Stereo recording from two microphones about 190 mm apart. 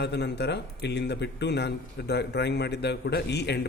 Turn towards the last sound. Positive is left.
turn(degrees=60)  # may be behind; listen again after turning